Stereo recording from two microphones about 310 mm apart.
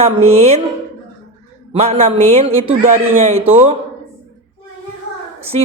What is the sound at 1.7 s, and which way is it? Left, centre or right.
A woman's voice, centre.